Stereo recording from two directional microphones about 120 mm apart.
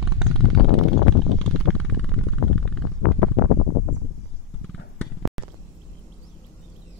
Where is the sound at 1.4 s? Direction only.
5° left (ahead or behind).